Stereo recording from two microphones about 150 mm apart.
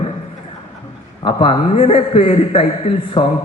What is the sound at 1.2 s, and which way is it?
A man's voice, 40° left (ahead or behind).